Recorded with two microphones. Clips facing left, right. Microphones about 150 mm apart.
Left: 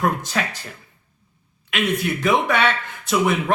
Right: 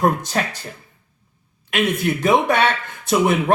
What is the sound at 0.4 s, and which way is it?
Speech, 40° right (ahead or behind).